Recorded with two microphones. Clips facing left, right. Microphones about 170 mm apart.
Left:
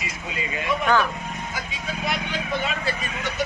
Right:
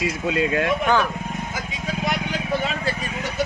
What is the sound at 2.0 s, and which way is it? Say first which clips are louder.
Vehicle: right 2 dB; 35° right (ahead or behind).